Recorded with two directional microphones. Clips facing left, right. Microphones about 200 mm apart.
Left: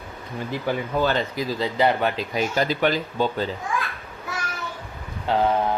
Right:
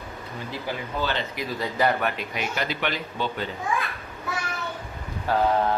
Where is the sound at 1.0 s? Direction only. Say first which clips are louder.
Left 4 dB; 40° left (ahead or behind).